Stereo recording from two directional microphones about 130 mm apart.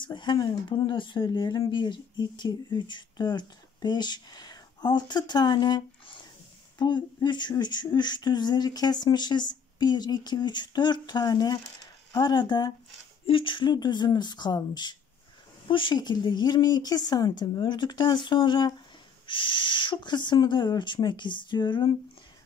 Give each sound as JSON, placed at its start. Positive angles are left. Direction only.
{"t": 0.0, "sound": "speech", "side_deg": 35}